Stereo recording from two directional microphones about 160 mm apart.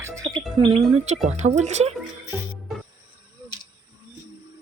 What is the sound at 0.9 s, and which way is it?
Speech, 45° right (ahead or behind).